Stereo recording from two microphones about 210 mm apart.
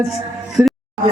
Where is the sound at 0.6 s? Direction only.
Centre (ahead or behind).